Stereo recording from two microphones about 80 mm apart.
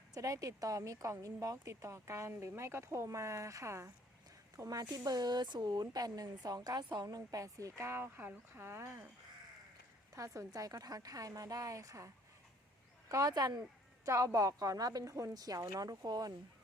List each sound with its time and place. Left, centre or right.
0.1 s speech: right
10.2 s speech: right
14.0 s speech: right